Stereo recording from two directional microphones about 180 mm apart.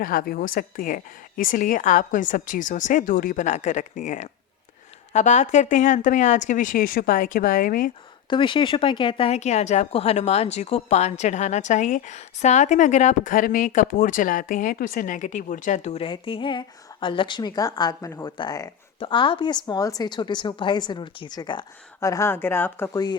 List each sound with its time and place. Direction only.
0.0 s a woman's voice: 55° left (ahead or behind)
8.3 s speech: 25° left (ahead or behind)